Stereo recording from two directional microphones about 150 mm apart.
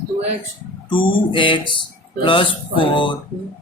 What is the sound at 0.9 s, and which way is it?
A man's voice, 35° left (ahead or behind).